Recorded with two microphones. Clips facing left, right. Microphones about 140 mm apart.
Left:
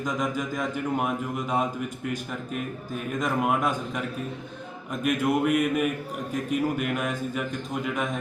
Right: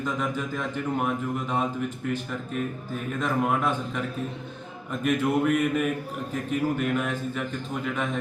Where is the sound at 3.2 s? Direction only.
10° left (ahead or behind).